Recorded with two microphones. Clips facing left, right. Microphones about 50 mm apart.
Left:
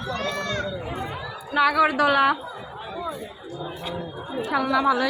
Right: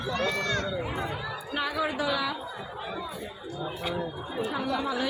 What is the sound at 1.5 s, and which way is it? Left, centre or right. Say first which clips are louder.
Speech: left 11 dB; left.